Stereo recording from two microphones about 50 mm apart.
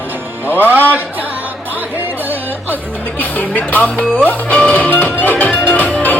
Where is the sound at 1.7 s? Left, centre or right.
Right.